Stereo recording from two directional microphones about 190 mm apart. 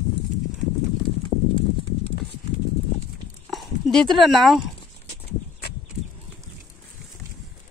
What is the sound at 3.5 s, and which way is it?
Speech, centre (ahead or behind).